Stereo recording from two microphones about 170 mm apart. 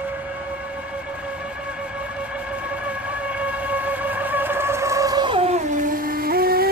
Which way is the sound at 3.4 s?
10° right (ahead or behind).